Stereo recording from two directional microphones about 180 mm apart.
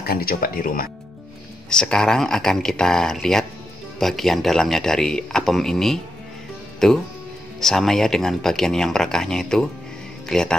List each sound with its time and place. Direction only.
0.0 s speech: 55° left (ahead or behind)
1.7 s speech: 5° left (ahead or behind)